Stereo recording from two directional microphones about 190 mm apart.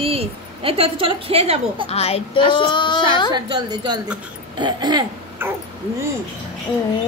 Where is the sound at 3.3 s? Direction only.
25° right (ahead or behind).